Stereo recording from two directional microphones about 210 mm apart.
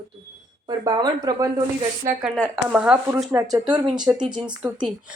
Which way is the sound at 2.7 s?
5° right (ahead or behind).